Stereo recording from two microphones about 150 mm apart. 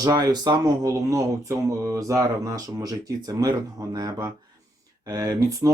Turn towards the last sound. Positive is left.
turn(degrees=-20)  # may be behind; listen again after turning